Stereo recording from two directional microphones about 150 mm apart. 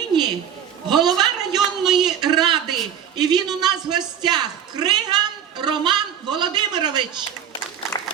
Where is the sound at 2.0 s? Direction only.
30° right (ahead or behind).